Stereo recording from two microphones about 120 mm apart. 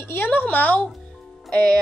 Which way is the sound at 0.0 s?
20° left (ahead or behind).